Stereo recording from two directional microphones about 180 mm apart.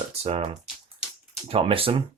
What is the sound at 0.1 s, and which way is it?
Speech, 35° right (ahead or behind).